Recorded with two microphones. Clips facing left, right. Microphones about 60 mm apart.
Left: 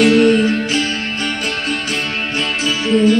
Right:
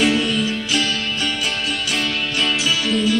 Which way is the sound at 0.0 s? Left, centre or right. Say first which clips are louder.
Left 7 dB; left.